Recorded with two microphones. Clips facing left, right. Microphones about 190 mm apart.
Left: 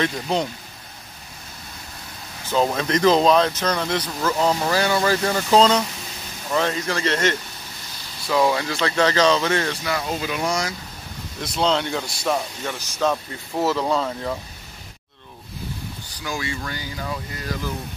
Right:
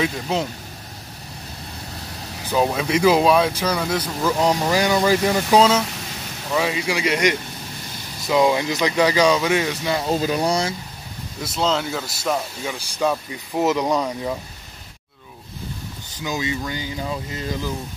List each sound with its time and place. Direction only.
0.0 s speech: centre (ahead or behind)
2.5 s speech: 10° right (ahead or behind)
9.8 s speech: 30° right (ahead or behind)
11.4 s speech: centre (ahead or behind)
16.2 s speech: 20° right (ahead or behind)